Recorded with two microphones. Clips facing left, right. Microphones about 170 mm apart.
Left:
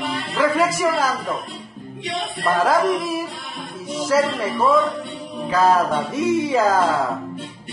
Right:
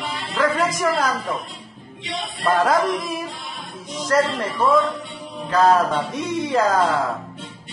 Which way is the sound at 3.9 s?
5° left (ahead or behind).